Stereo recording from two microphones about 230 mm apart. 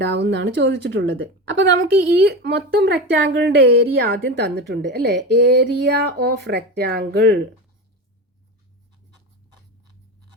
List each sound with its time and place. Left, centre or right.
0.0 s a woman's voice: right